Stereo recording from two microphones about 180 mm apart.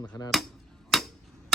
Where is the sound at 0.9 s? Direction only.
Centre (ahead or behind).